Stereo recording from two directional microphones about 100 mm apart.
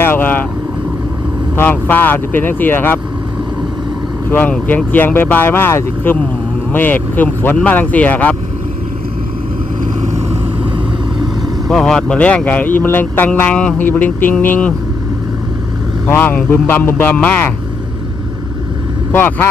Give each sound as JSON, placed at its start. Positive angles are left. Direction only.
{"t": 0.1, "sound": "speech", "side_deg": 15}
{"t": 1.6, "sound": "speech", "side_deg": 20}
{"t": 4.3, "sound": "speech", "side_deg": 15}
{"t": 11.6, "sound": "speech", "side_deg": 5}
{"t": 16.1, "sound": "speech", "side_deg": 15}
{"t": 19.1, "sound": "speech", "side_deg": 20}